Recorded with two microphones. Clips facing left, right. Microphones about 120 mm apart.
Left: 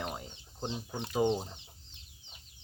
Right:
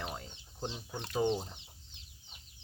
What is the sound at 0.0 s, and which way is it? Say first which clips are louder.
Chicken: left 3 dB; 10° left (ahead or behind).